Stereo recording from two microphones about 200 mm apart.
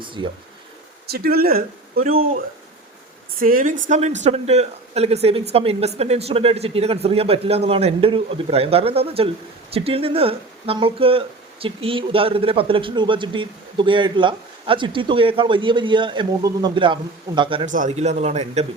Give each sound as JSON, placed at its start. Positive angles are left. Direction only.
{"t": 0.0, "sound": "speech", "side_deg": -25}
{"t": 1.0, "sound": "speech", "side_deg": -50}
{"t": 3.4, "sound": "speech", "side_deg": -45}
{"t": 17.7, "sound": "speech", "side_deg": -35}